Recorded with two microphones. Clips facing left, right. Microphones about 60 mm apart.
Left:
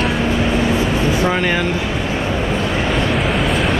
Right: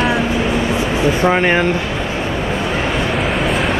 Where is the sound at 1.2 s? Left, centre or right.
Right.